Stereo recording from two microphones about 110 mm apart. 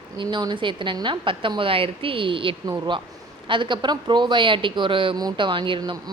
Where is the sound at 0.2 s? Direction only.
45° right (ahead or behind).